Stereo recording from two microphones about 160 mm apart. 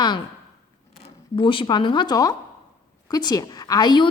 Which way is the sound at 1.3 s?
30° left (ahead or behind).